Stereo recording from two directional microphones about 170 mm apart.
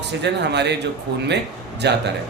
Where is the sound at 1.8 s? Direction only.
85° right.